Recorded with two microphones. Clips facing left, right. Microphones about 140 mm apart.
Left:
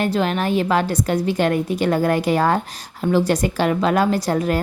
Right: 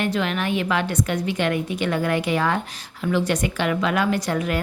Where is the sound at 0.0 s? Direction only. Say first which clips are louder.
Left 4 dB; 35° left (ahead or behind).